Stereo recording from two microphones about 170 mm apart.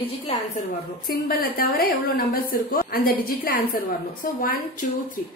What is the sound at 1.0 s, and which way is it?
A woman's voice, 60° left (ahead or behind).